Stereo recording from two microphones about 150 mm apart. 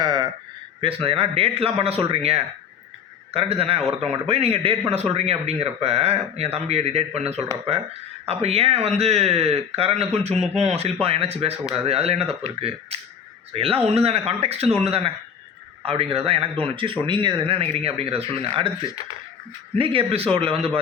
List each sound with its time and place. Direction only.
0.0 s a sound: 25° right (ahead or behind)
0.8 s a man's voice: 40° right (ahead or behind)
19.7 s a man's voice: 35° right (ahead or behind)